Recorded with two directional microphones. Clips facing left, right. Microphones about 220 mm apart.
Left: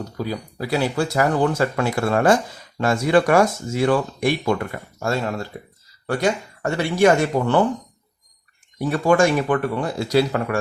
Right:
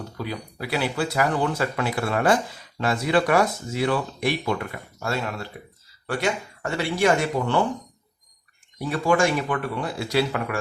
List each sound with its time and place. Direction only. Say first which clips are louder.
0.2 s speech: left 5 dB; 40° left (ahead or behind)
8.9 s speech: left 4 dB; 45° left (ahead or behind)